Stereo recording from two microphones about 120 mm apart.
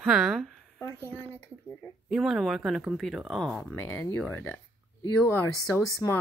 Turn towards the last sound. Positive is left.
turn(degrees=25)  # may be behind; listen again after turning